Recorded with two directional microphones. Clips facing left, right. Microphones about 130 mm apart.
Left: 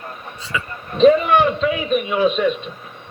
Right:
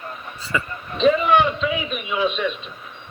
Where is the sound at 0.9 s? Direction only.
45° left (ahead or behind).